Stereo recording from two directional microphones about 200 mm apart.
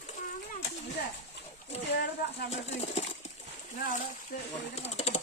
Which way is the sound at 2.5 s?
30° left (ahead or behind).